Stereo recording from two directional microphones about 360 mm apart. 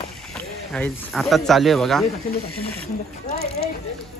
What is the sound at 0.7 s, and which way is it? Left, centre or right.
Speech, centre.